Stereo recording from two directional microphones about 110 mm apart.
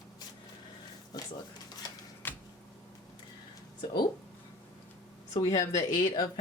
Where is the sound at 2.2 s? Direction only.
15° left (ahead or behind).